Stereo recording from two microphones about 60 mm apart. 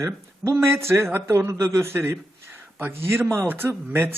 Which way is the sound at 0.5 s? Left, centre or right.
Right.